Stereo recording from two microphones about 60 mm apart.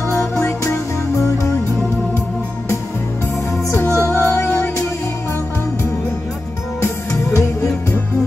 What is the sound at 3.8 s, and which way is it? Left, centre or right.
Music, left.